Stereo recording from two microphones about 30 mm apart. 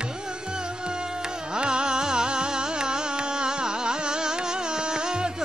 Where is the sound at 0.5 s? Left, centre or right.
Right.